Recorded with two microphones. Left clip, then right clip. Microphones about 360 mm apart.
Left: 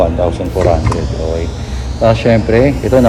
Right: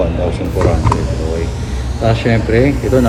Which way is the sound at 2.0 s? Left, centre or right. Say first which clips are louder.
Left 5 dB; centre.